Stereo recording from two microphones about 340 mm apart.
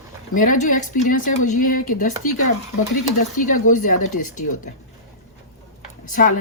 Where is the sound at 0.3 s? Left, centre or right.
Left.